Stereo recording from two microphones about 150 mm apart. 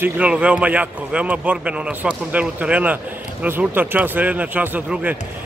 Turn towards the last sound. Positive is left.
turn(degrees=-10)  # may be behind; listen again after turning